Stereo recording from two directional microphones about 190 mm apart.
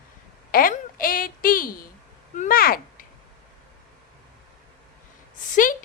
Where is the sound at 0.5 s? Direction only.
50° left (ahead or behind).